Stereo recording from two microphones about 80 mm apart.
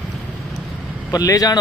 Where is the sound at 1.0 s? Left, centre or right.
Left.